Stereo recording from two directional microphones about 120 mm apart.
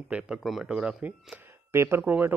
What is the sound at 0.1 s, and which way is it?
Speech, 5° right (ahead or behind).